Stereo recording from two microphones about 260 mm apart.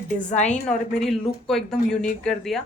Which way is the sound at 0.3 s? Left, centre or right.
Left.